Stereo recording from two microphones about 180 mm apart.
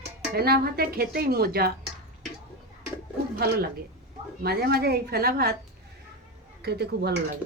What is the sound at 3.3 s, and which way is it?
A woman's voice, 60° right (ahead or behind).